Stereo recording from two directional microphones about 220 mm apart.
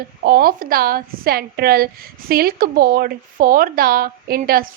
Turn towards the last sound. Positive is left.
turn(degrees=-40)  # may be behind; listen again after turning